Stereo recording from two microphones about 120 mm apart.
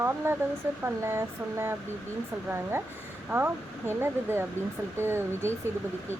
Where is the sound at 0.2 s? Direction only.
20° right (ahead or behind).